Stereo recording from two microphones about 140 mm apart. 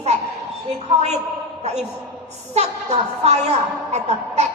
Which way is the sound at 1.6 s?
50° right (ahead or behind).